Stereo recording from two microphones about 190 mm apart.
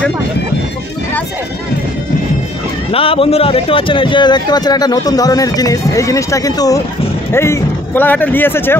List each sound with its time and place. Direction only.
2.9 s a man's voice: 30° left (ahead or behind); by 8.7 s 10° left (ahead or behind)